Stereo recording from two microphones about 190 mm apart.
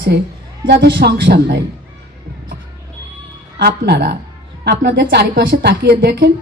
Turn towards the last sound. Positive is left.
turn(degrees=-60)  # may be behind; listen again after turning